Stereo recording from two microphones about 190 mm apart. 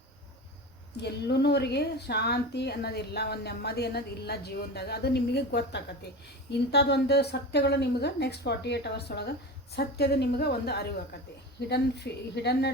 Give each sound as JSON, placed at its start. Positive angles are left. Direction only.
{"t": 1.0, "sound": "a woman's voice", "side_deg": 60}